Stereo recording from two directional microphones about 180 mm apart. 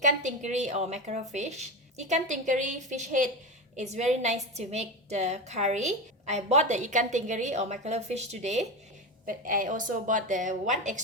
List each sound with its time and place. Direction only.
0.0 s a woman's voice: 40° right (ahead or behind)
9.2 s a woman's voice: 50° right (ahead or behind)